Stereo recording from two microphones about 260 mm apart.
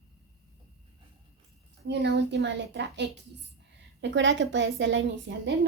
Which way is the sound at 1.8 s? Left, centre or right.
Right.